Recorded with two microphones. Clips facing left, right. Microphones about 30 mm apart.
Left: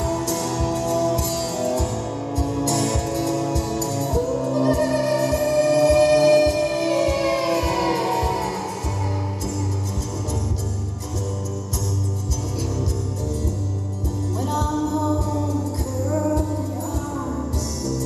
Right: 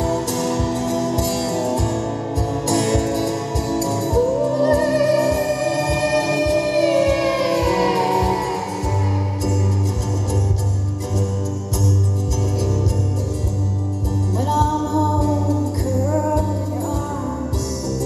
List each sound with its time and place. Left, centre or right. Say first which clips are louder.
0.1 s music: right 2 dB; right
0.4 s music: right 2 dB; centre
2.8 s music: right 4 dB; right
6.2 s music: left 2 dB; right
7.3 s music: right 3 dB; right
7.7 s music: right 4 dB; right